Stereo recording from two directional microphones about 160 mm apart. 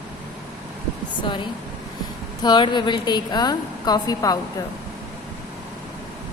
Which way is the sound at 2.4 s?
30° left (ahead or behind).